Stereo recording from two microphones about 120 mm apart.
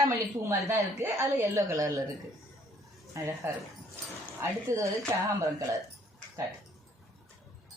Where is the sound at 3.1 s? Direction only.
25° right (ahead or behind).